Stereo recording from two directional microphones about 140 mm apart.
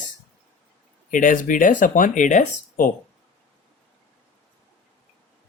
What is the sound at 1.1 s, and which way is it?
Speech, 70° left (ahead or behind).